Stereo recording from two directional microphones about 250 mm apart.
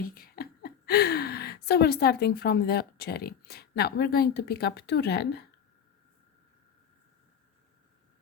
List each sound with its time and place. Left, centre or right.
0.0 s speech: left